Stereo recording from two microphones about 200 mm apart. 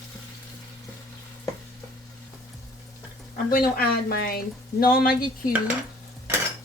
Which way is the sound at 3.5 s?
50° left (ahead or behind).